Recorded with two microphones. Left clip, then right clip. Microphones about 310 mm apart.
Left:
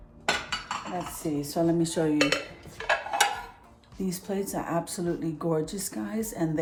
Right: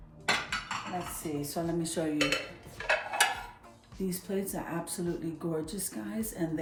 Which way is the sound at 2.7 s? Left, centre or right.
Centre.